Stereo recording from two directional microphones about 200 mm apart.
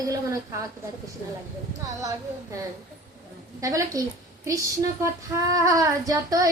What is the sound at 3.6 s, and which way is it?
Speech, 15° right (ahead or behind).